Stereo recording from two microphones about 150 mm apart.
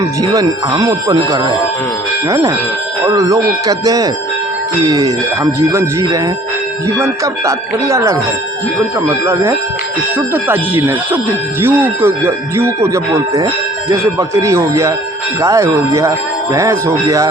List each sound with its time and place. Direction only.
0.2 s speech: 25° right (ahead or behind)